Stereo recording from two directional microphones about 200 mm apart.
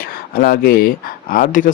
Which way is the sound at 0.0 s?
50° left (ahead or behind).